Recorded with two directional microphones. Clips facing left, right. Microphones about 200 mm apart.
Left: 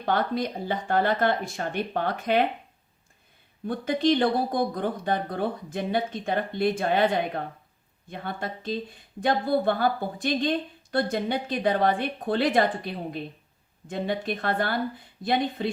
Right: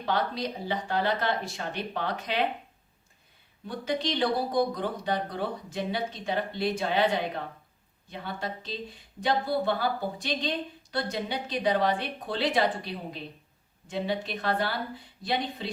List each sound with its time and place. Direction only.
0.0 s speech: 50° left (ahead or behind)
3.7 s speech: 50° left (ahead or behind)